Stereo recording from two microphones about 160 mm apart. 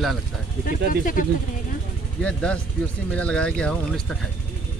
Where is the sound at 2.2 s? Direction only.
5° left (ahead or behind).